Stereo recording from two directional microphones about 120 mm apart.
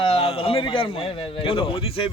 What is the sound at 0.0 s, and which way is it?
A man's voice, 50° left (ahead or behind).